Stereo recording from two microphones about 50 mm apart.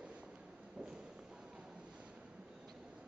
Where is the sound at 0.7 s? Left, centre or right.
Right.